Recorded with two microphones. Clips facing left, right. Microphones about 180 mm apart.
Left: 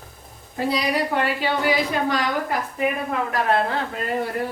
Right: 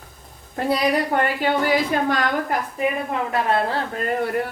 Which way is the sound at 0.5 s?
55° right (ahead or behind).